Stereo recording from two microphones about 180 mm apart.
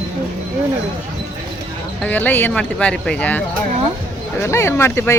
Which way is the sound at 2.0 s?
10° left (ahead or behind).